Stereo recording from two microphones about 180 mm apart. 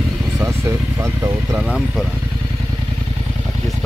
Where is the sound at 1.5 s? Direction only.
5° right (ahead or behind).